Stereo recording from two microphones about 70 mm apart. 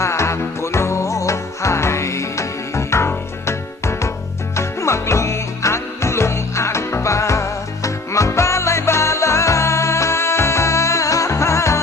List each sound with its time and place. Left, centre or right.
0.0 s music: left